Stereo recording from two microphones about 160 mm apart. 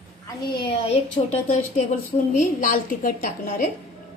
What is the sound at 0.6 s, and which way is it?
Speech, 35° left (ahead or behind).